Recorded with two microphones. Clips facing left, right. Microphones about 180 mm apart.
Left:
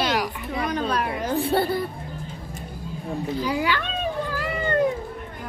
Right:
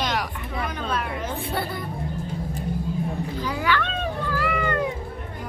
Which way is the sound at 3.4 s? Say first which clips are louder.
Right 1 dB; 15° left (ahead or behind).